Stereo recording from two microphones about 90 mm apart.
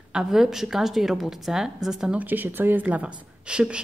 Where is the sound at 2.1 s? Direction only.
20° right (ahead or behind).